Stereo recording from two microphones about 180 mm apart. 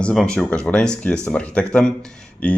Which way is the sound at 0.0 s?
5° left (ahead or behind).